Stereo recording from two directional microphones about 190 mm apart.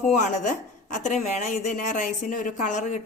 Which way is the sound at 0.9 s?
40° left (ahead or behind).